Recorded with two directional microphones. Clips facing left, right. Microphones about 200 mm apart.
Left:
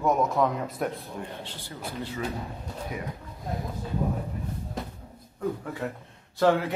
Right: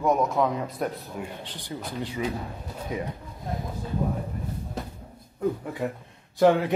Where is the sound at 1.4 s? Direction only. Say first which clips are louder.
Right 2 dB; 15° right (ahead or behind).